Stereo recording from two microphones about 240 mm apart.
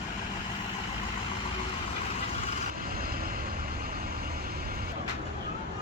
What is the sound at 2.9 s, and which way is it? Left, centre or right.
Vehicle, right.